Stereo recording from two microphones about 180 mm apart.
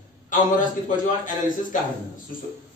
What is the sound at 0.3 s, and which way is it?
Speech, 45° left (ahead or behind).